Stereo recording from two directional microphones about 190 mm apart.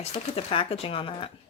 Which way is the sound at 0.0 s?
30° left (ahead or behind).